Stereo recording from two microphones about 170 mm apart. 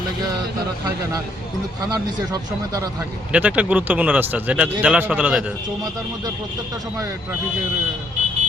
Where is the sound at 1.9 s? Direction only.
20° right (ahead or behind).